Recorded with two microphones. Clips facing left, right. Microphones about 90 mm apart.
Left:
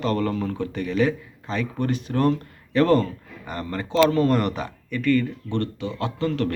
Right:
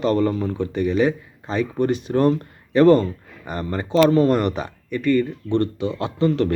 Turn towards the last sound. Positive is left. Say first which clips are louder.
# right 5 dB
turn(degrees=-20)  # may be behind; listen again after turning